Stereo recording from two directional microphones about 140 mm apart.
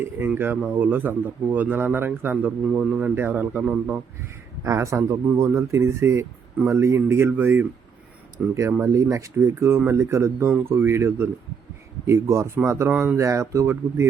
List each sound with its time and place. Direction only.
0.0 s speech: 15° right (ahead or behind)
4.6 s speech: 20° right (ahead or behind)